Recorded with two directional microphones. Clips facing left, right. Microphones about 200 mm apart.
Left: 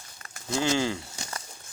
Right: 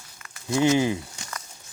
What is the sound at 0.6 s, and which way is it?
Speech, 20° right (ahead or behind).